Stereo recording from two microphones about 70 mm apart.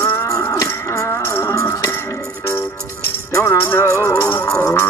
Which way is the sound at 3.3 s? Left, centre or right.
Left.